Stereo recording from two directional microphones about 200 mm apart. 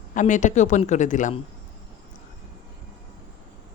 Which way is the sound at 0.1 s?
40° left (ahead or behind).